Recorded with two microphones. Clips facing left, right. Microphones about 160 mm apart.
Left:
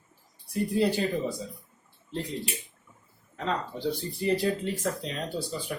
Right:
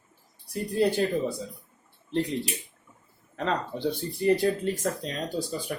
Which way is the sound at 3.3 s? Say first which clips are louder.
Right 2 dB; 70° right (ahead or behind).